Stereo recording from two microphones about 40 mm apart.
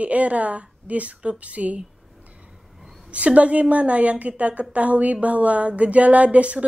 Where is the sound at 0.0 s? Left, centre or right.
Right.